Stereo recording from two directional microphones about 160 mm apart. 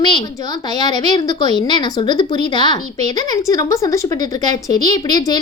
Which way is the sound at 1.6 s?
30° left (ahead or behind).